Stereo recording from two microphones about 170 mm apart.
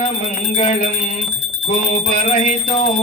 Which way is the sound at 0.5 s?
45° left (ahead or behind).